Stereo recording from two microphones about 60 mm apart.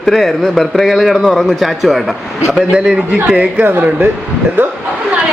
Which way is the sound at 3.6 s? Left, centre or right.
Right.